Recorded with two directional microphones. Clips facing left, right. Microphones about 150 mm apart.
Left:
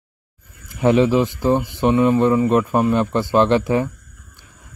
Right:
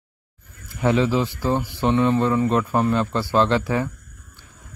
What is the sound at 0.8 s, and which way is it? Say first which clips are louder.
A man's voice: left 5 dB; 15° left (ahead or behind).